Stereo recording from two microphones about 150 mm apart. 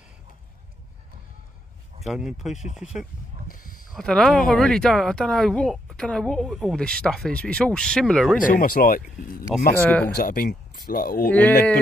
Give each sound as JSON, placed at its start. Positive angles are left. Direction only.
{"t": 2.0, "sound": "speech", "side_deg": -5}
{"t": 3.4, "sound": "a sound", "side_deg": 65}
{"t": 3.9, "sound": "speech", "side_deg": 5}
{"t": 8.5, "sound": "speech", "side_deg": 70}
{"t": 9.8, "sound": "speech", "side_deg": 10}
{"t": 10.1, "sound": "speech", "side_deg": 75}
{"t": 11.2, "sound": "speech", "side_deg": 10}